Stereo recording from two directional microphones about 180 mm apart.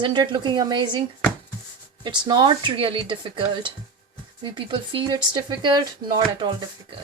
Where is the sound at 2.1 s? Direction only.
25° right (ahead or behind).